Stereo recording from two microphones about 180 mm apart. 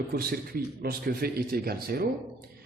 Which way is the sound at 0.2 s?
55° right (ahead or behind).